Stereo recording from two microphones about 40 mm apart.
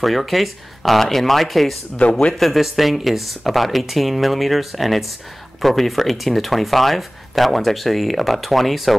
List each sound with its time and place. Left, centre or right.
0.0 s speech: centre
2.0 s speech: left
2.3 s speech: centre